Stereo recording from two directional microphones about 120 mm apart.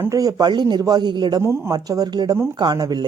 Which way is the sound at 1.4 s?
20° right (ahead or behind).